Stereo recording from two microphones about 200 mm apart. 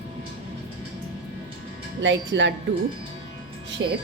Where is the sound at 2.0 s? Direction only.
65° right (ahead or behind).